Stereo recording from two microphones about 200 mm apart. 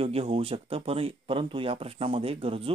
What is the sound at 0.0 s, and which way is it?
Speech, 30° right (ahead or behind).